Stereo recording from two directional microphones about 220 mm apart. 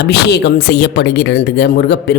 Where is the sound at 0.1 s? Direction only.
50° left (ahead or behind).